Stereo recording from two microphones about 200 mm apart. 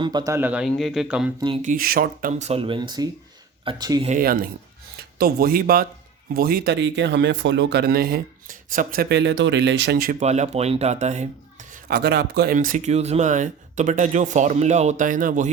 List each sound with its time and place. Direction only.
0.0 s a man's voice: 20° right (ahead or behind); by 1.3 s 5° right (ahead or behind)
1.6 s speech: 45° right (ahead or behind)
2.5 s speech: 25° right (ahead or behind)
4.0 s speech: 40° right (ahead or behind)
10.2 s speech: 35° right (ahead or behind)
11.7 s speech: 50° right (ahead or behind)
12.5 s speech: 40° right (ahead or behind)